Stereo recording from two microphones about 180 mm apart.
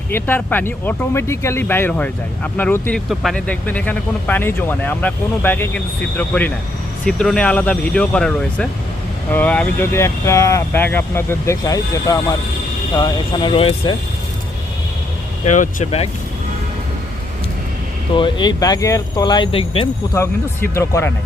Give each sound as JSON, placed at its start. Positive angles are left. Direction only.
{"t": 0.1, "sound": "speech", "side_deg": 10}
{"t": 15.4, "sound": "speech", "side_deg": 45}
{"t": 18.1, "sound": "speech", "side_deg": 25}
{"t": 20.1, "sound": "speech", "side_deg": 15}